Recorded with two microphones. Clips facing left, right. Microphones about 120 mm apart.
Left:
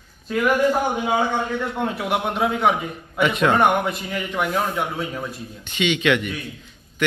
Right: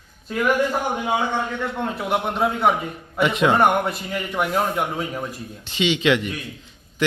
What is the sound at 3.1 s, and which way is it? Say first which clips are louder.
Speech: even; 25° right (ahead or behind).